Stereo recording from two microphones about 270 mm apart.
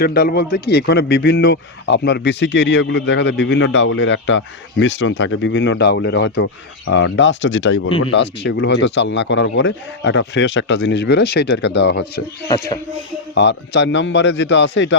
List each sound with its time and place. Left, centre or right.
0.0 s a man's voice: left
13.3 s a man's voice: left